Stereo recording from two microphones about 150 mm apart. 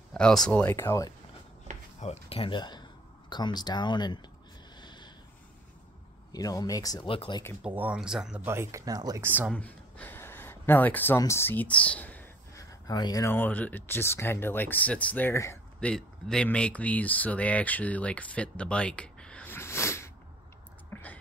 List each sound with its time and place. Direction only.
0.1 s speech: 5° left (ahead or behind)
2.0 s speech: 40° left (ahead or behind)
4.7 s snort: 30° left (ahead or behind)
6.3 s speech: 25° left (ahead or behind)
7.1 s speech: 35° left (ahead or behind)
7.6 s speech: 10° right (ahead or behind)
8.5 s speech: 20° right (ahead or behind)
9.2 s speech: 10° right (ahead or behind)
9.5 s a sound: 10° left (ahead or behind)
12.8 s speech: 25° left (ahead or behind)
15.8 s speech: 5° left (ahead or behind)
20.9 s a sound: 10° left (ahead or behind)